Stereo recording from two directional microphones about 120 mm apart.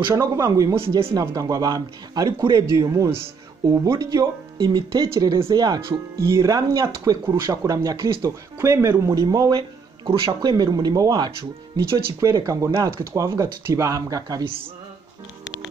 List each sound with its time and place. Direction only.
0.1 s speech: 30° right (ahead or behind)
0.7 s speech: 50° right (ahead or behind)
1.2 s speech: 30° right (ahead or behind)
9.1 s speech: 35° right (ahead or behind)